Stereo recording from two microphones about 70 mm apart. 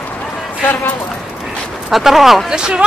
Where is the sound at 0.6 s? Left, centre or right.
Left.